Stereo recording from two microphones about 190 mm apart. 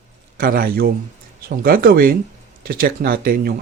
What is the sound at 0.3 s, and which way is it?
Speech, 50° right (ahead or behind).